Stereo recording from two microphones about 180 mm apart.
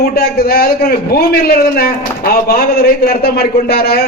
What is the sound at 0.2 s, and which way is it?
A man's voice, 55° left (ahead or behind).